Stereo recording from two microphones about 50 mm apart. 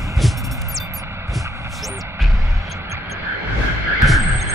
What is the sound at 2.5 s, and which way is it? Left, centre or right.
Music, right.